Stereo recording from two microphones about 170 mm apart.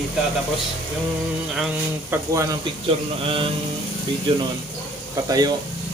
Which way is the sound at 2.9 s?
30° right (ahead or behind).